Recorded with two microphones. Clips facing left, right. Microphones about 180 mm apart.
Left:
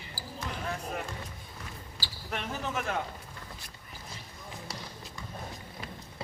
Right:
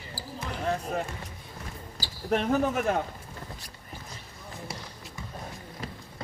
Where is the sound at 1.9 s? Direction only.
45° right (ahead or behind).